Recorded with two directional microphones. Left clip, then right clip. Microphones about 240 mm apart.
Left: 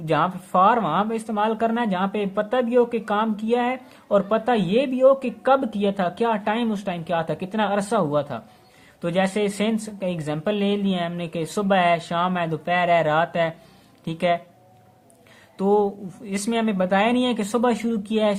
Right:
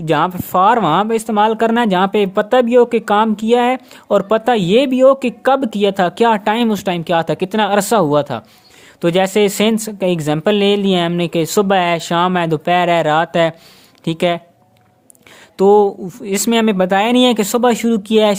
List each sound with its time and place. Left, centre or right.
0.0 s speech: right
15.5 s speech: right